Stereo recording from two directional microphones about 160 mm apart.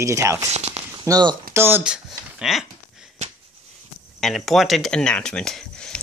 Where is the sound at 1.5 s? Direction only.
15° right (ahead or behind).